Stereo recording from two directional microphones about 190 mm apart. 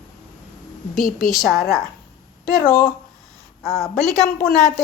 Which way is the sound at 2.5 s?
45° left (ahead or behind).